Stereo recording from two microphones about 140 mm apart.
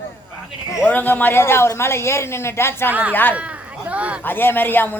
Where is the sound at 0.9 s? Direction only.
15° left (ahead or behind).